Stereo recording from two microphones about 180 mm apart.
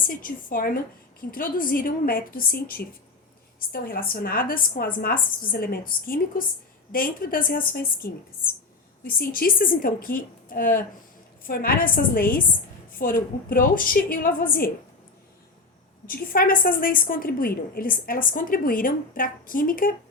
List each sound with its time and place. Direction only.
0.0 s a woman's voice: 50° left (ahead or behind)
16.0 s a woman's voice: 55° left (ahead or behind)